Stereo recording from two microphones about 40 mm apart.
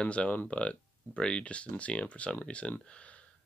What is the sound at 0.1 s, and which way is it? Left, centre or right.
Speech, left.